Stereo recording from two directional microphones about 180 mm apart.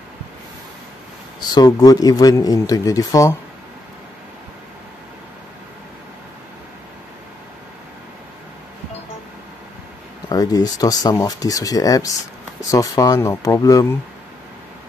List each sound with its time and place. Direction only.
1.4 s speech: 20° left (ahead or behind)
10.3 s speech: 20° left (ahead or behind)